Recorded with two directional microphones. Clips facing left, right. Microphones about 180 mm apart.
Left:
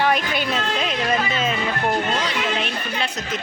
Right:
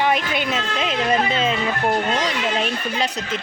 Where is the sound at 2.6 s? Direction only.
35° right (ahead or behind).